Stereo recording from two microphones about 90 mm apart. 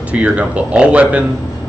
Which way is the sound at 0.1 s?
15° right (ahead or behind).